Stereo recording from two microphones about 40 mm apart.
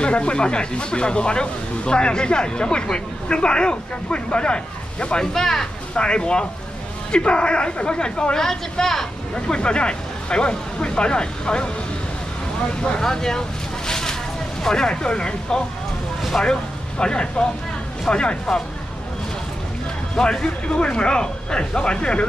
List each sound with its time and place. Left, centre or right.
0.0 s speech: left
5.3 s speech: centre
5.9 s speech: left
9.3 s speech: left
13.0 s speech: centre
13.8 s vehicle: centre
14.6 s speech: centre
20.2 s speech: centre